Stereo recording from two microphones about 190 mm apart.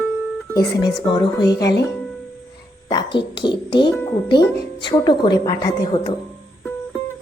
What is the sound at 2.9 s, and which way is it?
Speech, 25° left (ahead or behind).